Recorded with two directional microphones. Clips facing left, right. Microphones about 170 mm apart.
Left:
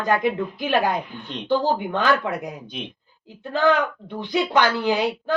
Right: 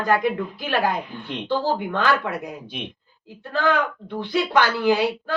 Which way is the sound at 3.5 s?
20° left (ahead or behind).